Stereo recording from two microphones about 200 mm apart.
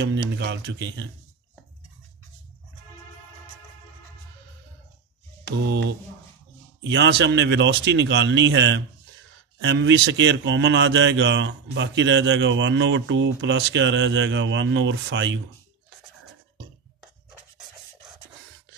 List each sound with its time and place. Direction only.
0.4 s a man's voice: 60° right (ahead or behind)
6.8 s a man's voice: 65° right (ahead or behind)